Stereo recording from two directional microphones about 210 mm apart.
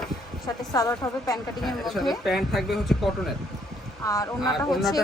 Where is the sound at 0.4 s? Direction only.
15° left (ahead or behind).